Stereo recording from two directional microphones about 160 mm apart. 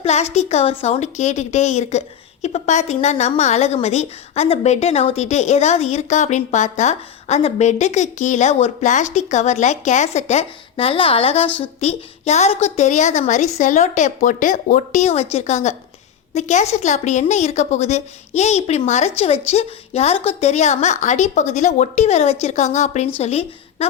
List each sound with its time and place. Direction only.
0.0 s a woman's voice: 45° left (ahead or behind)